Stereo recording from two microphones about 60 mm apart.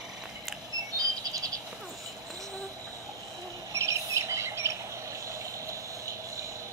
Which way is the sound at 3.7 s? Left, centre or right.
Right.